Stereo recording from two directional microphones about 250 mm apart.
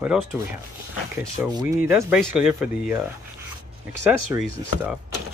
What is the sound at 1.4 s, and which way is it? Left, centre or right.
Speech, centre.